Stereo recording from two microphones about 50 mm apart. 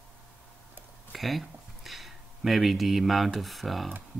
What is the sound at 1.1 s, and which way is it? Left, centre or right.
Speech, centre.